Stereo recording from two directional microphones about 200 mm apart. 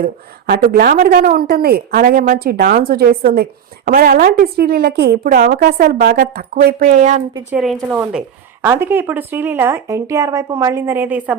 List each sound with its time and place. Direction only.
0.0 s a woman's voice: 50° right (ahead or behind)
7.5 s a woman's voice: 5° right (ahead or behind)